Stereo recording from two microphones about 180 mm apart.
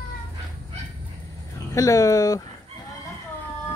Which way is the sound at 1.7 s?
20° left (ahead or behind).